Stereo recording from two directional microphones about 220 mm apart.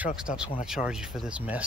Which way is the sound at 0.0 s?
5° right (ahead or behind).